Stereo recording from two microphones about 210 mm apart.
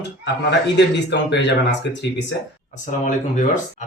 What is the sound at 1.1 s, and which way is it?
Speech, 55° left (ahead or behind).